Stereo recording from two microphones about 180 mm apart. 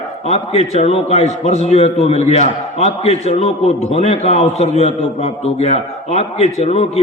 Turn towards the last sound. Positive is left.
turn(degrees=35)  # may be behind; listen again after turning